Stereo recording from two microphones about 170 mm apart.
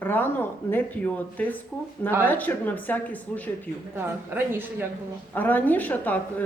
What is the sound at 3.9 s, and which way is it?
Speech, 10° right (ahead or behind).